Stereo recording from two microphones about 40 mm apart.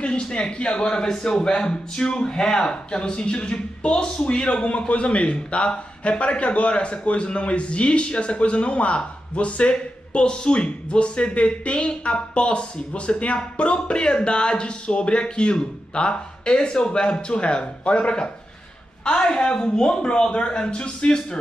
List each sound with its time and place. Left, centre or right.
0.0 s a man's voice: left